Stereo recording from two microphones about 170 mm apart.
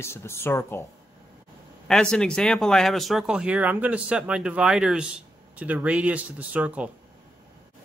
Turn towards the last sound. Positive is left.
turn(degrees=-5)  # may be behind; listen again after turning